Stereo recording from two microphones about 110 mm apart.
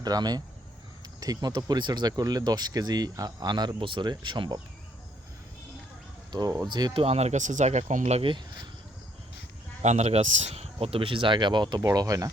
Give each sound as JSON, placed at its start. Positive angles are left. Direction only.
{"t": 0.0, "sound": "speech", "side_deg": -35}
{"t": 6.7, "sound": "speech", "side_deg": -40}
{"t": 6.9, "sound": "speech", "side_deg": -65}
{"t": 9.8, "sound": "speech", "side_deg": -85}
{"t": 11.9, "sound": "speech", "side_deg": -30}